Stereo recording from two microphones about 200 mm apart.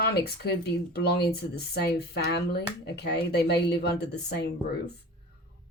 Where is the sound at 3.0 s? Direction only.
55° left (ahead or behind).